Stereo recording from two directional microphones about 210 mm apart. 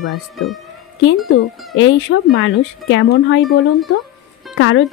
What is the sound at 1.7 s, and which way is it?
Speech, 65° left (ahead or behind).